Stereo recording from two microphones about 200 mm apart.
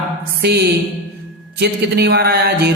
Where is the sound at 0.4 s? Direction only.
55° right (ahead or behind).